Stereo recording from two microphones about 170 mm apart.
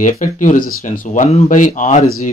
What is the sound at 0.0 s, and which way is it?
Speech, 50° left (ahead or behind).